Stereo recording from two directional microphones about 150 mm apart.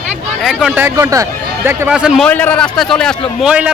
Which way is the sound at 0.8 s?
20° right (ahead or behind).